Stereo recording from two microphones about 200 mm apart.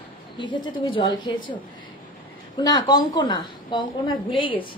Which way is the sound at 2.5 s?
20° left (ahead or behind).